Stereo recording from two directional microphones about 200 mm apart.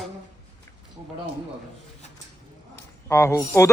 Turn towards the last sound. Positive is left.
turn(degrees=15)  # may be behind; listen again after turning